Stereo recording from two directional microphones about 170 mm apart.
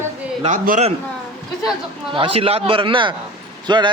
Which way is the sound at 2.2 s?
30° right (ahead or behind).